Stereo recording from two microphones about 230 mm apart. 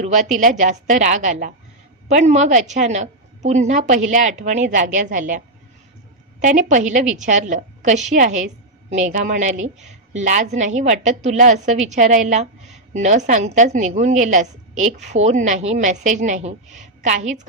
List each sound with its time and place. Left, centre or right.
0.0 s a woman's voice: right
6.4 s a woman's voice: right